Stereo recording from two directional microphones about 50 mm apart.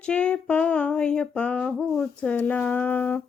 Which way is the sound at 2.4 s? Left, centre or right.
Left.